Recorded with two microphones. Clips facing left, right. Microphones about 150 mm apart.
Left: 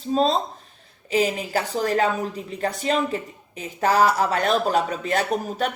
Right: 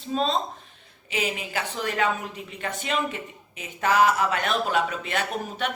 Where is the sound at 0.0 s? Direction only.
35° left (ahead or behind).